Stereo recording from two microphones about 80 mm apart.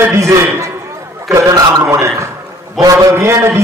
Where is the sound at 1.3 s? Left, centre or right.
Right.